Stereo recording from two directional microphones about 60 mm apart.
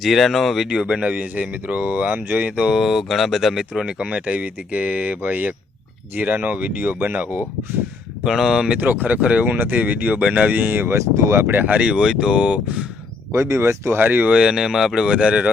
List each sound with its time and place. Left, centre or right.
0.0 s speech: centre
0.7 s speech: centre
2.6 s speech: centre
4.1 s speech: right
8.2 s speech: centre
8.8 s speech: right
10.9 s speech: right
11.7 s speech: centre
13.3 s speech: right
14.0 s speech: right
14.3 s speech: centre
15.1 s speech: right